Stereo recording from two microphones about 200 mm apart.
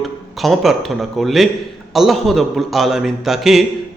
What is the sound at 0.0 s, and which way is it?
A man's voice, centre (ahead or behind).